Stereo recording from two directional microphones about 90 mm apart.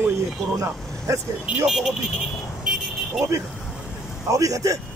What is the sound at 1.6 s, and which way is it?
Vehicle, 5° right (ahead or behind).